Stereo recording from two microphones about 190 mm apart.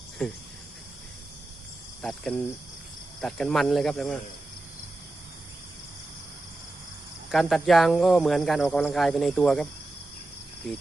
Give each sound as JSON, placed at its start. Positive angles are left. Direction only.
{"t": 0.2, "sound": "speech", "side_deg": 0}
{"t": 2.0, "sound": "cricket", "side_deg": 0}
{"t": 3.2, "sound": "speech", "side_deg": 0}
{"t": 7.3, "sound": "speech", "side_deg": 0}